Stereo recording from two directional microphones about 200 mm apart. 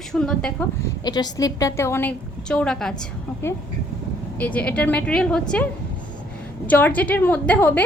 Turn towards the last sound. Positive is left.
turn(degrees=10)  # may be behind; listen again after turning